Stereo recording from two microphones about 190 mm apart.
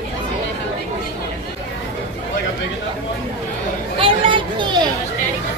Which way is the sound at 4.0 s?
25° right (ahead or behind).